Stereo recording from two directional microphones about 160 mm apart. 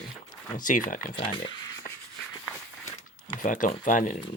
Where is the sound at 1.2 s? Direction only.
30° left (ahead or behind).